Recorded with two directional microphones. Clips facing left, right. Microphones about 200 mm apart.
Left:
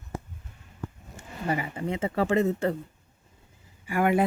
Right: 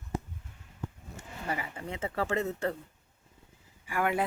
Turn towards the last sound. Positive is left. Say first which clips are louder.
# left 6 dB
turn(degrees=15)  # may be behind; listen again after turning